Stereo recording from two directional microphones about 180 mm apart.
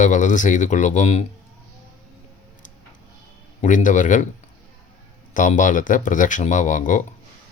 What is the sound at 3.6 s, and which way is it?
Speech, 45° left (ahead or behind).